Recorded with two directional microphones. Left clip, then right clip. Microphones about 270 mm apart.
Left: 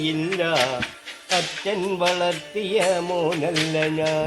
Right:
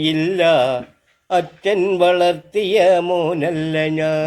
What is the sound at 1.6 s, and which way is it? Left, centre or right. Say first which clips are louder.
Music: right 11 dB; right.